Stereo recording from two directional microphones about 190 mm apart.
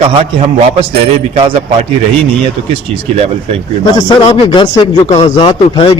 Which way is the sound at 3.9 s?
20° left (ahead or behind).